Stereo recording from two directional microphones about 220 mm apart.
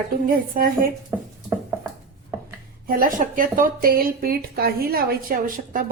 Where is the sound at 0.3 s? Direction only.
40° right (ahead or behind).